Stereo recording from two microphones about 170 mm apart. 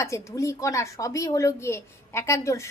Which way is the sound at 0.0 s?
15° left (ahead or behind).